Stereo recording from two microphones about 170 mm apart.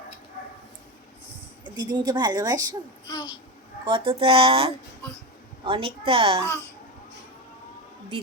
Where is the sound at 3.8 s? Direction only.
30° right (ahead or behind).